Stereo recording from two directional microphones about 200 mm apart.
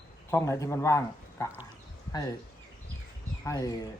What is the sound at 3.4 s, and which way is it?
Speech, 15° left (ahead or behind).